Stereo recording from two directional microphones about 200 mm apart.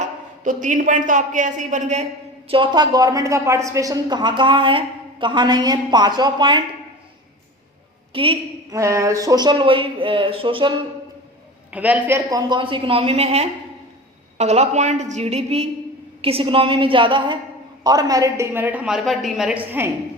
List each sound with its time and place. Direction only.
0.4 s a man's voice: 40° right (ahead or behind)
2.5 s a woman's voice: 25° right (ahead or behind)
8.1 s a woman's voice: 25° right (ahead or behind)
8.7 s a woman's voice: 15° right (ahead or behind)
11.7 s a woman's voice: 10° right (ahead or behind)